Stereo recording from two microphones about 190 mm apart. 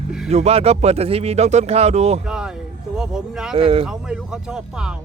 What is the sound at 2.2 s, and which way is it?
Speech, 5° right (ahead or behind).